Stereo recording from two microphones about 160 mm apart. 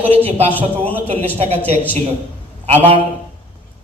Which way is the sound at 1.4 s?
40° right (ahead or behind).